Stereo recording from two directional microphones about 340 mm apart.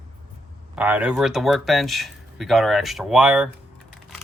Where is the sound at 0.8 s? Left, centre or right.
Centre.